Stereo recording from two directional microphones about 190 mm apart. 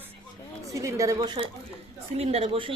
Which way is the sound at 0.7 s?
15° right (ahead or behind).